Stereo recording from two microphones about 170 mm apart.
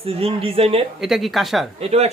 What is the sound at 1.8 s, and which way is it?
Speech, 40° right (ahead or behind).